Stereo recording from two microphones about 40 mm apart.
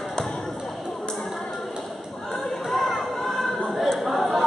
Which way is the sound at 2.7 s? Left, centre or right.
Centre.